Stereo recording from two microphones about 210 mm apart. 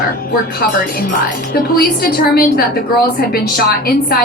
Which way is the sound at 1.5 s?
45° left (ahead or behind).